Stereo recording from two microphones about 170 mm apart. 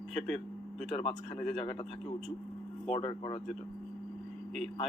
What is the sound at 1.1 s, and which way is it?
Speech, 5° left (ahead or behind).